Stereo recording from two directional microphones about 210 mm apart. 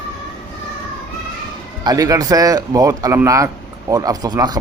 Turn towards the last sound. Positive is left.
turn(degrees=-20)  # may be behind; listen again after turning